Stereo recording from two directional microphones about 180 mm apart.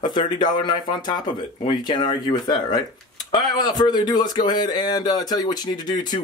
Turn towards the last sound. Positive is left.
turn(degrees=25)  # may be behind; listen again after turning